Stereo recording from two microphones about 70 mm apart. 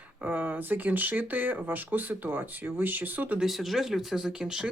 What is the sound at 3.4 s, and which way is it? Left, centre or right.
Speech, centre.